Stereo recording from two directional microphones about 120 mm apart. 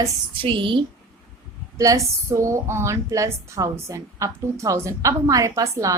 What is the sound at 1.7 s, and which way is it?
A woman's voice, 25° right (ahead or behind).